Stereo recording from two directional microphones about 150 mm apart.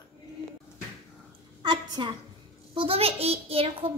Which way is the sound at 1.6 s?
30° right (ahead or behind).